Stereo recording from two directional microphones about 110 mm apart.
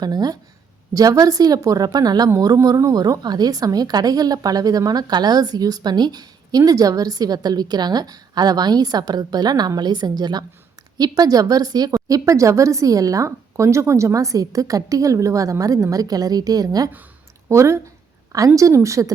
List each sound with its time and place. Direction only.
0.0 s a woman's voice: 40° right (ahead or behind)